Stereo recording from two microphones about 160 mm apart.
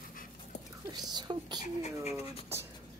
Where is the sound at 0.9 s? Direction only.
25° right (ahead or behind).